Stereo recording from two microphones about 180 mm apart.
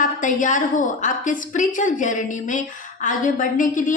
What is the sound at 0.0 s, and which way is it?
A woman's voice, 45° left (ahead or behind).